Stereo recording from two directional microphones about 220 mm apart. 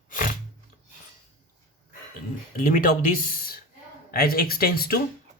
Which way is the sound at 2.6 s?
40° left (ahead or behind).